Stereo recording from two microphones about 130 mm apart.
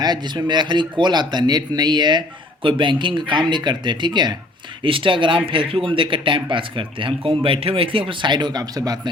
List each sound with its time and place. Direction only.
0.0 s speech: 35° right (ahead or behind)